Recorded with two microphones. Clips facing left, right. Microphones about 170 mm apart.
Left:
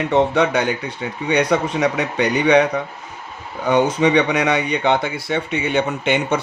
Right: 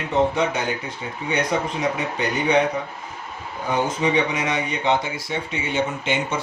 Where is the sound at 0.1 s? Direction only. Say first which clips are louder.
Left 3 dB; 70° left (ahead or behind).